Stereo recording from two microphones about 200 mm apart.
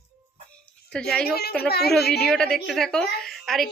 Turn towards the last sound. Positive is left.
turn(degrees=0)  # may be behind; listen again after turning